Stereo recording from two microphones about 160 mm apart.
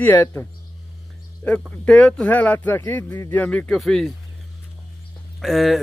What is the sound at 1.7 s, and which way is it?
Speech, 5° left (ahead or behind).